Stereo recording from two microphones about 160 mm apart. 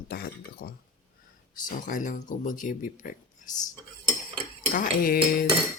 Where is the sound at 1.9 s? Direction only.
55° left (ahead or behind).